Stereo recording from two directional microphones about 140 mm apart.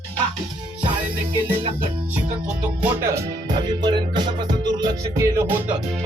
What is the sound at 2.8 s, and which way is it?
Speech, 10° right (ahead or behind).